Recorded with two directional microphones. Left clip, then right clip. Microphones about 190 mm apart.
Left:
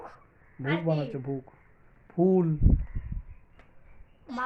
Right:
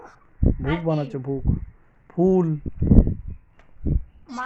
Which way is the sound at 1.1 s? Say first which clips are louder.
Right 7 dB; 40° right (ahead or behind).